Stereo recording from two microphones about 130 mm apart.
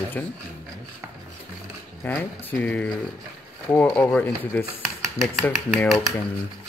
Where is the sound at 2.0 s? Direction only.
15° left (ahead or behind).